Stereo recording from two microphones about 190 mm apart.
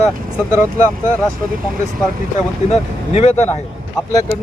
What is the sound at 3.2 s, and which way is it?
Speech, 35° left (ahead or behind).